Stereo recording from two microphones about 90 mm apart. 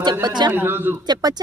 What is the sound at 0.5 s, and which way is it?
Speech, 25° right (ahead or behind).